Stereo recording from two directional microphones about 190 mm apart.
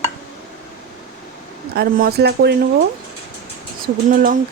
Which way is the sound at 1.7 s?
55° right (ahead or behind).